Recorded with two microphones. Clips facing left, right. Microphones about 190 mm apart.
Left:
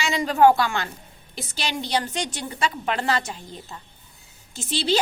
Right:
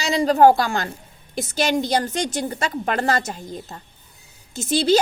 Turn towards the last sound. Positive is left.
turn(degrees=-45)  # may be behind; listen again after turning